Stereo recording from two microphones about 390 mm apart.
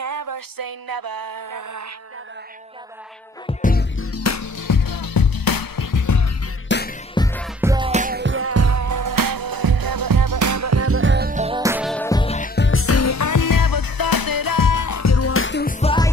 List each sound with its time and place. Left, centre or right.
0.0 s music: right
3.4 s music: left
6.7 s music: left
7.2 s music: centre
7.6 s music: centre